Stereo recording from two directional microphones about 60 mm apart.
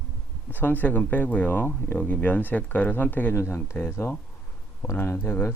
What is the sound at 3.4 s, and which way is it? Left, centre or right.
Speech, left.